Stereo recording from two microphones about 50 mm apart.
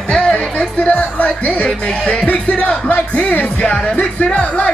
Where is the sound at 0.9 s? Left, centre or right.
Left.